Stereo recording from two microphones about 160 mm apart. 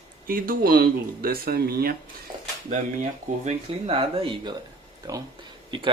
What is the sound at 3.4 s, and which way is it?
Speech, 40° right (ahead or behind).